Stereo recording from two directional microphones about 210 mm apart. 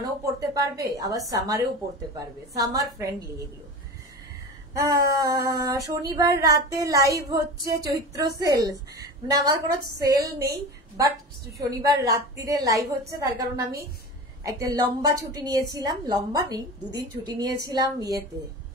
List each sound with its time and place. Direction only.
0.0 s a woman's voice: 15° right (ahead or behind)
4.7 s a woman's voice: 15° right (ahead or behind)
11.5 s a woman's voice: 15° right (ahead or behind)